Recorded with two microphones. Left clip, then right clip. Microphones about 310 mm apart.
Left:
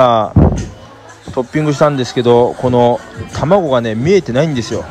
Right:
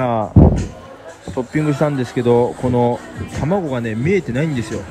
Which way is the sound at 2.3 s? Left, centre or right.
Right.